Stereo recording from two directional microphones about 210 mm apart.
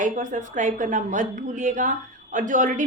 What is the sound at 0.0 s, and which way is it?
A woman's voice, 35° right (ahead or behind).